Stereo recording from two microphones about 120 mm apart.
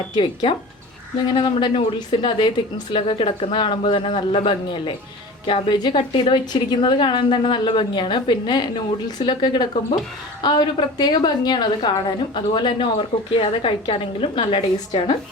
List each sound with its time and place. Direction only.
1.3 s a woman's voice: 45° left (ahead or behind)